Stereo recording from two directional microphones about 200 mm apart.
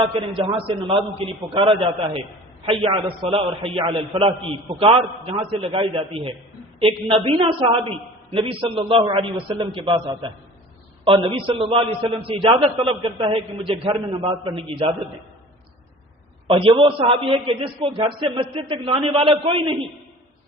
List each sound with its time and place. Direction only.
0.2 s a man's voice: 25° right (ahead or behind)
11.0 s a man's voice: 25° right (ahead or behind)
16.5 s a man's voice: 25° right (ahead or behind)